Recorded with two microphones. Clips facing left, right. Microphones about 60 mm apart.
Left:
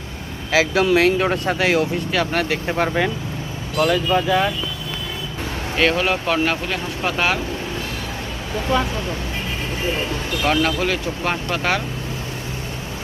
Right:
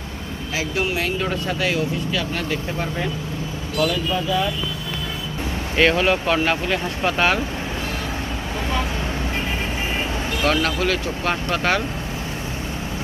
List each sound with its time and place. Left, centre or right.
0.5 s speech: left
3.8 s speech: left
5.7 s speech: centre
10.4 s speech: centre